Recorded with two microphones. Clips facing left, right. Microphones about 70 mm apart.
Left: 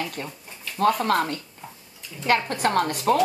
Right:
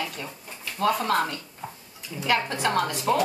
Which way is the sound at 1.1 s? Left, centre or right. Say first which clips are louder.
Left 2 dB; left.